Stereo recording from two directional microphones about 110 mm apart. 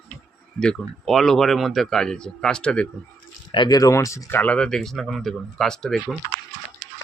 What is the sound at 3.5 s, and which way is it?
Speech, 40° left (ahead or behind).